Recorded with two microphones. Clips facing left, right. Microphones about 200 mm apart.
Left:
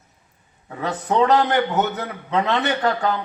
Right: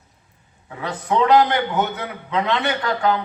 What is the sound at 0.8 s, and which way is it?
A man's voice, 40° left (ahead or behind).